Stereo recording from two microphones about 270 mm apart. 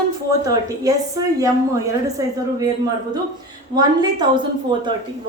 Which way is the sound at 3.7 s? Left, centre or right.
Centre.